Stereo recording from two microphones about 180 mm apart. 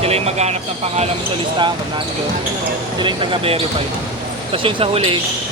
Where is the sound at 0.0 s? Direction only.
35° right (ahead or behind).